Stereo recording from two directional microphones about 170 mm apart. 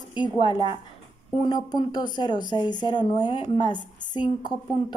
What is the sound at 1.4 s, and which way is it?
Speech, 25° left (ahead or behind).